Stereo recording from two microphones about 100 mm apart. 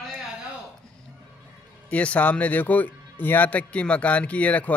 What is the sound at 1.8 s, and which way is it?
Speech, 15° left (ahead or behind).